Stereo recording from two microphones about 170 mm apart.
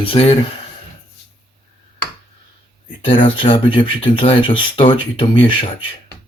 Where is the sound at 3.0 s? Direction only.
30° left (ahead or behind).